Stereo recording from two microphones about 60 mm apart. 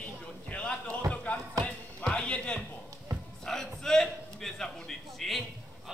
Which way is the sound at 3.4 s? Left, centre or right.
Centre.